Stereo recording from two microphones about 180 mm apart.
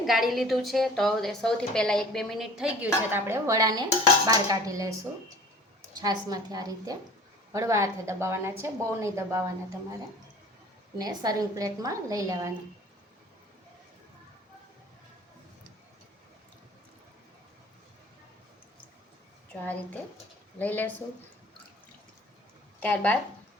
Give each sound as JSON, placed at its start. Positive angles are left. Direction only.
{"t": 0.0, "sound": "a woman's voice", "side_deg": 0}
{"t": 6.0, "sound": "a woman's voice", "side_deg": -20}
{"t": 10.9, "sound": "a woman's voice", "side_deg": -20}
{"t": 20.6, "sound": "speech", "side_deg": 10}
{"t": 22.8, "sound": "speech", "side_deg": 10}